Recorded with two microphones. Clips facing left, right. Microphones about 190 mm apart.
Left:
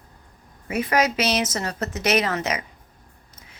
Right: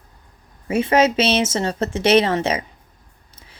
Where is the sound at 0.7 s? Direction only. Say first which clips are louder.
Right 5 dB; 25° right (ahead or behind).